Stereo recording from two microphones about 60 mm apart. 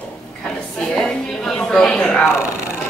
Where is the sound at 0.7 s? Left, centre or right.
Centre.